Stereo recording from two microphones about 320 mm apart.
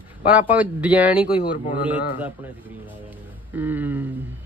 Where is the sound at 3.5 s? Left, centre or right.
Centre.